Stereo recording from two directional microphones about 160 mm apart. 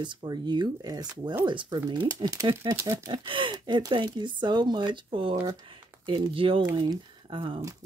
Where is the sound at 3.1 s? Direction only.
30° right (ahead or behind).